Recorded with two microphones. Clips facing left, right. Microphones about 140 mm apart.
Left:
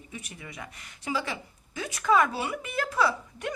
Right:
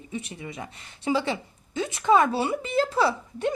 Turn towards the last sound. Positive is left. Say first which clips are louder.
# right 3 dB
turn(degrees=-30)  # may be behind; listen again after turning